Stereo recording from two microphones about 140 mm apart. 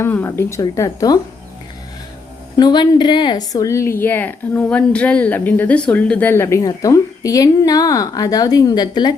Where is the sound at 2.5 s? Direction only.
30° left (ahead or behind).